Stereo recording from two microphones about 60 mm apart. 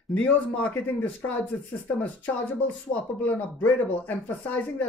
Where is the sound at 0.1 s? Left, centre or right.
Left.